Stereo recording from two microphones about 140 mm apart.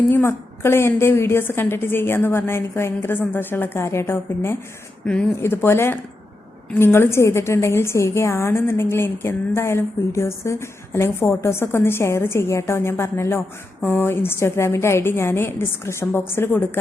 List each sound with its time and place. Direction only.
0.1 s a woman's voice: 15° left (ahead or behind)